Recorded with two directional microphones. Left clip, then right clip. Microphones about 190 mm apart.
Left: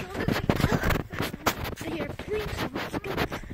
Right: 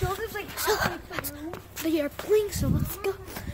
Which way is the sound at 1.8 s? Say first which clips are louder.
Right 10 dB; 15° right (ahead or behind).